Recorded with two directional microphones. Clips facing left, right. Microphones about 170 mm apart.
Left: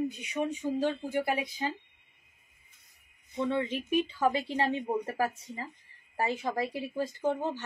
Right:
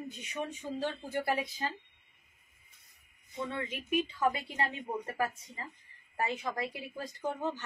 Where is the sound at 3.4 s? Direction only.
25° left (ahead or behind).